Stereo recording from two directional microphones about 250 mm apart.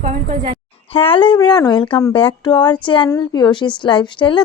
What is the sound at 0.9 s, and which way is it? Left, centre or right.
A woman's voice, left.